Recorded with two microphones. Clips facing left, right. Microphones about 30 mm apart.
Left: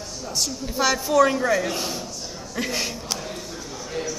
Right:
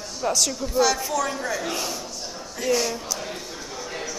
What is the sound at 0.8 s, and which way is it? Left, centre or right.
Speech, centre.